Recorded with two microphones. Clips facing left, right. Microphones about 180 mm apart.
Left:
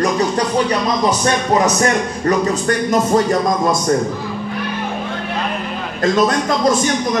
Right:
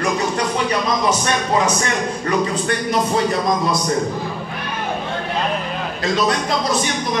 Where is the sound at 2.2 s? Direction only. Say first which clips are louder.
Left 4 dB; 45° left (ahead or behind).